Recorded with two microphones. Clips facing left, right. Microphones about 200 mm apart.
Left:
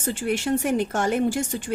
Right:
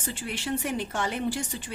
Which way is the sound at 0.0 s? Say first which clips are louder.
Left 9 dB; 45° left (ahead or behind).